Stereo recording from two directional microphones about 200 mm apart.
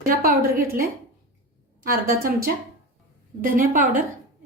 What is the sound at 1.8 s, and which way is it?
Speech, 45° right (ahead or behind).